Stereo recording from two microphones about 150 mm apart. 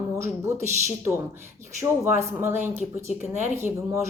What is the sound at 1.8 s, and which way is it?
A woman's voice, 20° right (ahead or behind).